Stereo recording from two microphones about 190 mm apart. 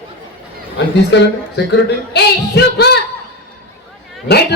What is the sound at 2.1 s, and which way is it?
Speech, 60° left (ahead or behind).